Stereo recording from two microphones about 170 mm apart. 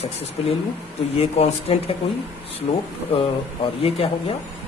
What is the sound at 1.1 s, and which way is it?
Speech, 35° left (ahead or behind).